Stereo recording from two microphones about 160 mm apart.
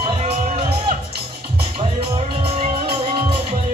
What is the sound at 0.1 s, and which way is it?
Music, 40° right (ahead or behind).